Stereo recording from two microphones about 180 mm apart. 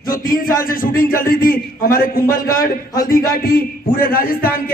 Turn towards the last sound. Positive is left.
turn(degrees=55)  # may be behind; listen again after turning